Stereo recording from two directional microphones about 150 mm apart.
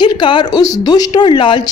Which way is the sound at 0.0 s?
30° left (ahead or behind).